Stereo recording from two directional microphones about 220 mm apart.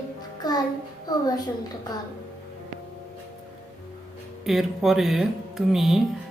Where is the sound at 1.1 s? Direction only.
15° left (ahead or behind).